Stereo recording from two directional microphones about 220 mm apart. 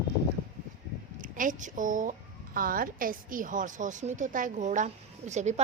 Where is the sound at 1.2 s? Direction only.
35° right (ahead or behind).